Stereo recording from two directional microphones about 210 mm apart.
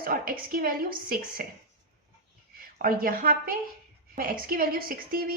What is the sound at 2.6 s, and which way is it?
A woman's voice, 45° right (ahead or behind).